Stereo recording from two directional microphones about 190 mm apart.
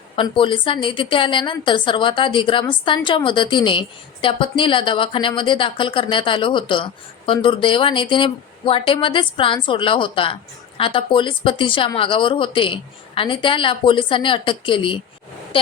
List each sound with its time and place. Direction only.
0.2 s a woman's voice: 25° left (ahead or behind)